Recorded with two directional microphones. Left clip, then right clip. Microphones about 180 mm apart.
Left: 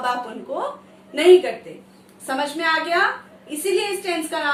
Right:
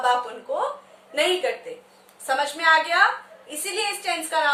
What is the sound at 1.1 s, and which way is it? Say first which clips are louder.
A woman's voice: left 8 dB; 20° right (ahead or behind).